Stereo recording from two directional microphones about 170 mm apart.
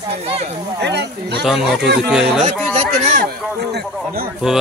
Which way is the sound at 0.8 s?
85° right.